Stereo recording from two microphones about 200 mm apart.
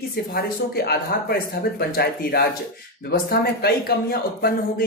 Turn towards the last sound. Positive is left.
turn(degrees=50)  # may be behind; listen again after turning